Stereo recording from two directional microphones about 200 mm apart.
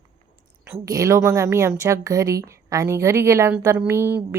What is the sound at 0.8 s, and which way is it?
Speech, 15° right (ahead or behind).